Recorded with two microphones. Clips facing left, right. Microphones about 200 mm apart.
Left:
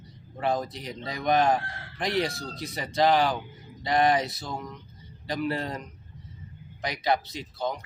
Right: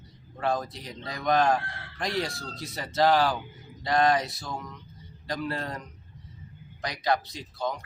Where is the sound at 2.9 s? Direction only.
15° left (ahead or behind).